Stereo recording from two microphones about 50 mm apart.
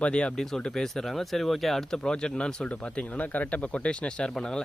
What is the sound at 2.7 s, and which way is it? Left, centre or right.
Speech, left.